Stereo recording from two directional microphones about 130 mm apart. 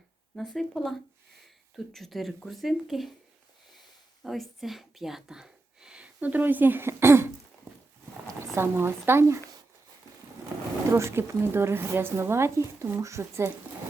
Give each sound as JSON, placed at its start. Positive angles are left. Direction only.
{"t": 0.3, "sound": "speech", "side_deg": 0}
{"t": 4.2, "sound": "speech", "side_deg": 0}
{"t": 8.5, "sound": "speech", "side_deg": -20}
{"t": 10.9, "sound": "speech", "side_deg": -20}